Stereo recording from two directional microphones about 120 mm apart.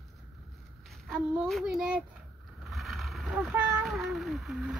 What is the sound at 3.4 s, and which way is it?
Speech, 10° right (ahead or behind).